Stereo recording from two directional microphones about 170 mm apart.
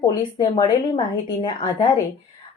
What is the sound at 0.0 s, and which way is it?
A woman's voice, 20° left (ahead or behind).